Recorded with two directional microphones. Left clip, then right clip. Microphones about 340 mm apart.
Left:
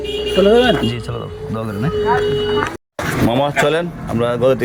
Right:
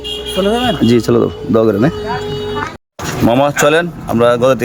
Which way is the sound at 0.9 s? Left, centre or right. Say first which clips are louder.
Right 12 dB; right.